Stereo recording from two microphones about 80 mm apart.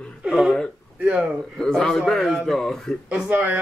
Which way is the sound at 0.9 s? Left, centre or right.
Centre.